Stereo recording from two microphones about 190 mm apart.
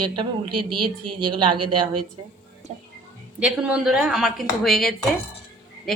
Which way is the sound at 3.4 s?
5° right (ahead or behind).